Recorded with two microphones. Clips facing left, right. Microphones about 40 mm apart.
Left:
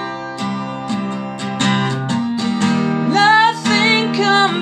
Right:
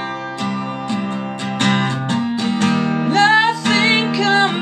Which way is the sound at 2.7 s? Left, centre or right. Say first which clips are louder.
Left 2 dB; centre.